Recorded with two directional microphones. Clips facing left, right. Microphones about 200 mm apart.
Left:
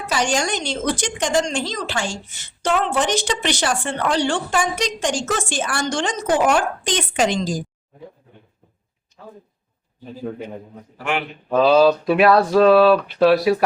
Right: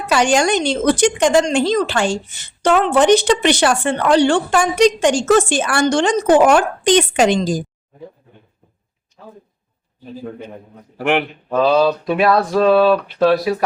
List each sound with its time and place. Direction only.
0.1 s speech: 65° right (ahead or behind)
10.9 s speech: 60° right (ahead or behind)
11.4 s speech: centre (ahead or behind)